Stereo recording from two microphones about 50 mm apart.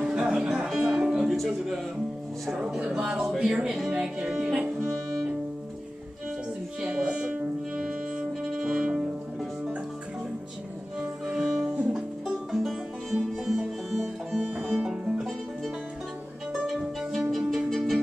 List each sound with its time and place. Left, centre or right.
0.0 s music: centre
1.3 s music: centre
2.9 s a sound: centre
3.3 s speech: centre
3.9 s music: centre
7.0 s music: centre
7.3 s music: centre
11.0 s music: right
13.5 s music: centre
17.2 s music: centre